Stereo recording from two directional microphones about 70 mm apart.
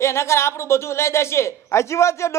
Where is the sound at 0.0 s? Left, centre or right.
Left.